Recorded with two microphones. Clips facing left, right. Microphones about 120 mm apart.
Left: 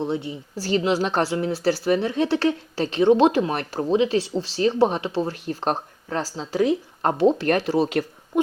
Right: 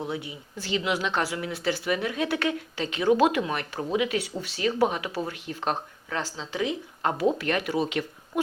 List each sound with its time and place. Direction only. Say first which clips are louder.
0.0 s speech: left 6 dB; 30° left (ahead or behind)
7.2 s speech: left 7 dB; 30° left (ahead or behind)